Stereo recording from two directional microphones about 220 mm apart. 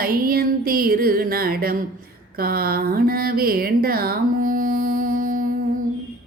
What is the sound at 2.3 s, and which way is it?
Speech, 45° right (ahead or behind).